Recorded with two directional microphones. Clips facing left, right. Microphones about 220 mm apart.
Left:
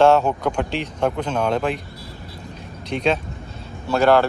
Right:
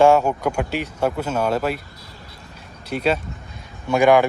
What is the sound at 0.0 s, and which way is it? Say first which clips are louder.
A man's voice: even; 10° right (ahead or behind).